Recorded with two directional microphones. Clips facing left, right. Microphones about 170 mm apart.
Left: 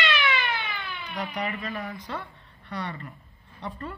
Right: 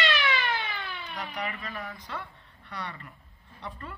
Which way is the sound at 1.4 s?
35° left (ahead or behind).